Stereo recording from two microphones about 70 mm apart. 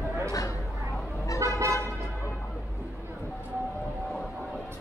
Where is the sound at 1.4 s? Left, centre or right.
Right.